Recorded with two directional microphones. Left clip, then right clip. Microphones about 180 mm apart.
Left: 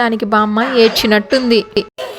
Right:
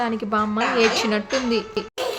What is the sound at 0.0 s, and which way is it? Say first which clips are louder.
Speech: left 9 dB; 45° left (ahead or behind).